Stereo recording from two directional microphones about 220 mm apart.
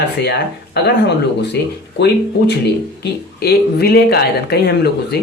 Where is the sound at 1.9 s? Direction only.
50° left (ahead or behind).